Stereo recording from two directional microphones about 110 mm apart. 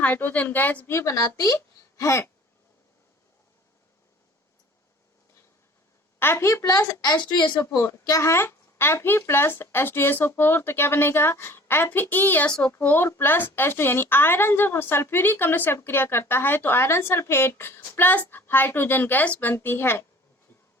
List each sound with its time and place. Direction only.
0.0 s a woman's voice: 15° left (ahead or behind)
0.9 s a woman's voice: 30° left (ahead or behind)
6.1 s a woman's voice: 20° left (ahead or behind); by 7.6 s 40° left (ahead or behind)
7.6 s a woman's voice: 20° left (ahead or behind)
12.5 s a woman's voice: 5° left (ahead or behind)
12.9 s a woman's voice: 20° left (ahead or behind)